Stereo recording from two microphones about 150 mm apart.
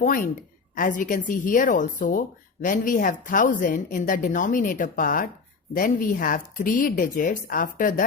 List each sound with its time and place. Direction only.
0.0 s a woman's voice: 65° left (ahead or behind)